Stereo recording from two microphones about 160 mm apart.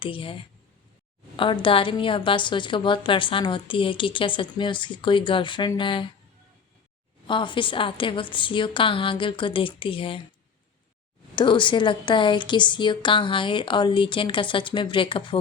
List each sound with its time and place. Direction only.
0.0 s a woman's voice: 35° left (ahead or behind)
1.4 s a woman's voice: 30° left (ahead or behind)
7.3 s a woman's voice: 30° left (ahead or behind)
11.3 s a woman's voice: 30° left (ahead or behind)